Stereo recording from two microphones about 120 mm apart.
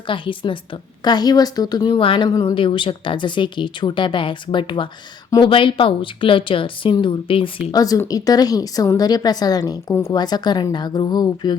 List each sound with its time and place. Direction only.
0.1 s a woman's voice: 45° left (ahead or behind)
7.7 s a woman's voice: 30° left (ahead or behind)